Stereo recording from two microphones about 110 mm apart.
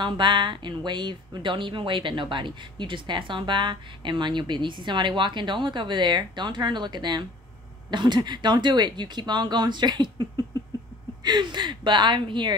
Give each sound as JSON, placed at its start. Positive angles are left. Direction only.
{"t": 0.0, "sound": "speech", "side_deg": -45}